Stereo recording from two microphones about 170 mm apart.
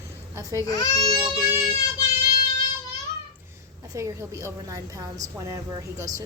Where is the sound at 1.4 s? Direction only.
15° right (ahead or behind).